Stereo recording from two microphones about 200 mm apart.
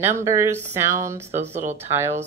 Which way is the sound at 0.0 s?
15° right (ahead or behind).